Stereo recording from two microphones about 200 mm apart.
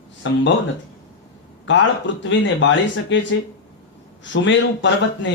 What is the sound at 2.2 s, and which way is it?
Speech, 65° left (ahead or behind).